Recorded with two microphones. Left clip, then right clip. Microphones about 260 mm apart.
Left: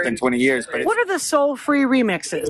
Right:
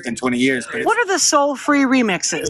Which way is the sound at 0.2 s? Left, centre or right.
Centre.